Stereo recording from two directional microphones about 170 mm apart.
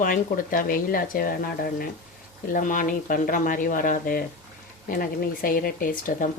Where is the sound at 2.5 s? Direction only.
50° left (ahead or behind).